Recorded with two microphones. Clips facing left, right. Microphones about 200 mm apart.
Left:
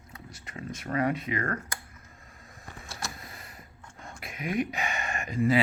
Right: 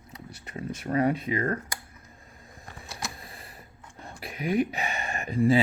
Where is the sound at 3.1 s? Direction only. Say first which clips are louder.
Right 1 dB; 30° right (ahead or behind).